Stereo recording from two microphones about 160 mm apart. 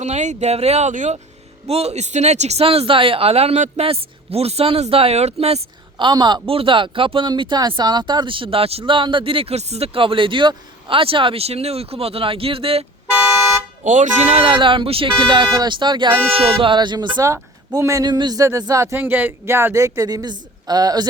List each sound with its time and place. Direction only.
0.0 s speech: 45° right (ahead or behind)
13.8 s speech: 50° right (ahead or behind); by 21.1 s 25° right (ahead or behind)